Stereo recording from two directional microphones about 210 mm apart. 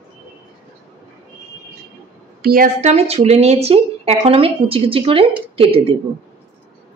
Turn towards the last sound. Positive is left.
turn(degrees=-25)  # may be behind; listen again after turning